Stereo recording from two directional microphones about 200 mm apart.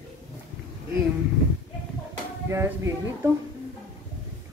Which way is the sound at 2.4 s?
15° right (ahead or behind).